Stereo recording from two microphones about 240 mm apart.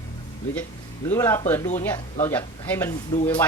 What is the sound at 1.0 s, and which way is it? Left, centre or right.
Speech, centre.